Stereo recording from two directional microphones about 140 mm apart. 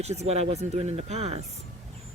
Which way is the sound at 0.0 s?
50° right (ahead or behind).